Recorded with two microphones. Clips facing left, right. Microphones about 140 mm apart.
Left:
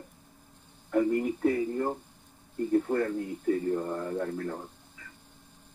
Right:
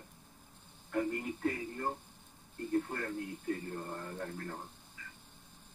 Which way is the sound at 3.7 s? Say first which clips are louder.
Left 10 dB; 90° left.